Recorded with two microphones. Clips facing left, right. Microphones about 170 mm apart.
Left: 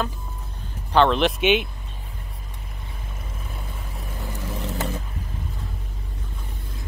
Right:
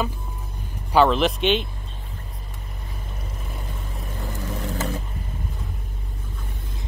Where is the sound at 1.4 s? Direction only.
10° left (ahead or behind).